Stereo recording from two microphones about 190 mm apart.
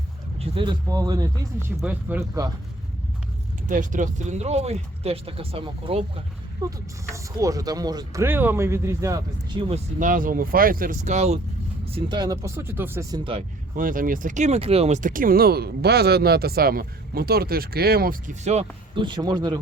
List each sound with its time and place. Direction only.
0.3 s speech: 25° right (ahead or behind); by 2.4 s 10° right (ahead or behind)
3.7 s speech: 40° right (ahead or behind)
6.6 s speech: 15° right (ahead or behind)
10.0 s speech: 45° right (ahead or behind); by 13.4 s 25° right (ahead or behind)
13.7 s speech: 45° right (ahead or behind)
18.9 s speech: 25° right (ahead or behind)